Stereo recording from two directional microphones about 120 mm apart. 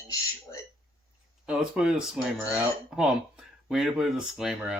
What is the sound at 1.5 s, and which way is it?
Speech, 5° right (ahead or behind).